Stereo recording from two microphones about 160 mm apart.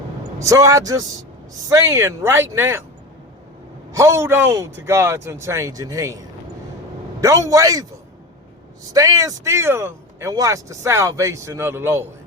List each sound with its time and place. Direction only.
0.3 s speech: 20° right (ahead or behind)
3.9 s speech: 15° right (ahead or behind)
8.9 s speech: 20° right (ahead or behind)